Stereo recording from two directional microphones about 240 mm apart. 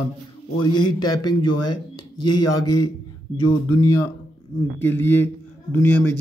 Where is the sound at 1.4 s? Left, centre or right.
Left.